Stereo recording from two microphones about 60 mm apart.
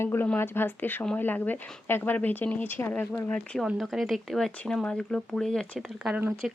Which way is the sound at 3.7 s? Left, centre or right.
Centre.